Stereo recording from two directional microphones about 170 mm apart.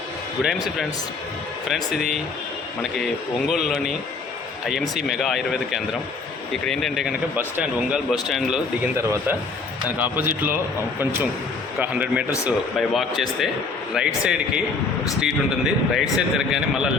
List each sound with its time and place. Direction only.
0.4 s a man's voice: centre (ahead or behind)
3.5 s a man's voice: centre (ahead or behind)
7.3 s a man's voice: 10° right (ahead or behind)
9.0 s a man's voice: 15° right (ahead or behind)
11.8 s a man's voice: 10° right (ahead or behind)